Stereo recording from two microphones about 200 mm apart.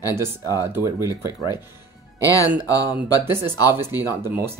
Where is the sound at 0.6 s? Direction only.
15° right (ahead or behind).